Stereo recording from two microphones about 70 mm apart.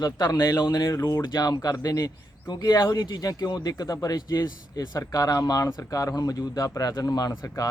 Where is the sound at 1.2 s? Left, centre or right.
Left.